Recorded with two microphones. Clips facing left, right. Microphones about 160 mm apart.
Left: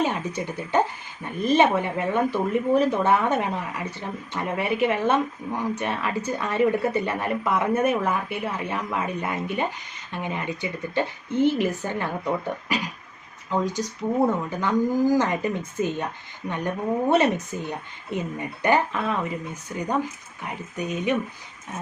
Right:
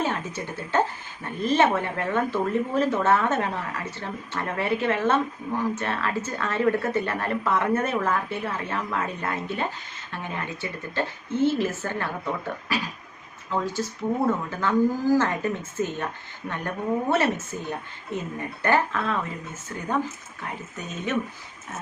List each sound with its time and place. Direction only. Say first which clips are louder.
0.0 s a woman's voice: left 3 dB; 15° left (ahead or behind)
14.6 s a woman's voice: left 1 dB; 15° left (ahead or behind)